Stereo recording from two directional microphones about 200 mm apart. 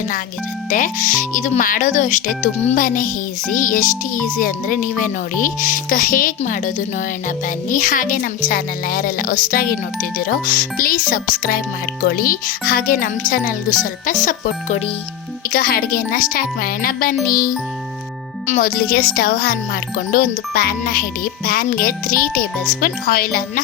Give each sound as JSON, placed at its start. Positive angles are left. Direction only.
{"t": 0.7, "sound": "speech", "side_deg": 40}